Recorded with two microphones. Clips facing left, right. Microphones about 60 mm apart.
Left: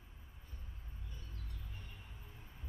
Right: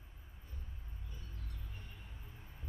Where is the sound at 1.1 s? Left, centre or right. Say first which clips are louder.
Right 1 dB; centre.